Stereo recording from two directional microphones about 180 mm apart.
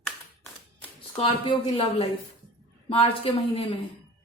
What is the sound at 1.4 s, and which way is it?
Speech, 30° left (ahead or behind).